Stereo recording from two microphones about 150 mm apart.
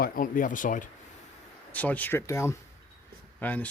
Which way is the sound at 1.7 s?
10° left (ahead or behind).